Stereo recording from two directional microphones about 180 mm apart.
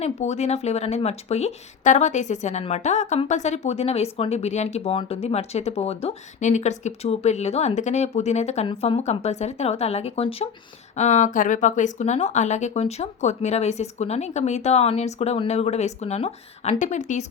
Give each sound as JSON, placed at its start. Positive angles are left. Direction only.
{"t": 0.0, "sound": "speech", "side_deg": 40}